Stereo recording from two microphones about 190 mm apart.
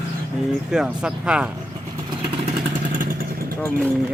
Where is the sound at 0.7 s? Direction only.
5° right (ahead or behind).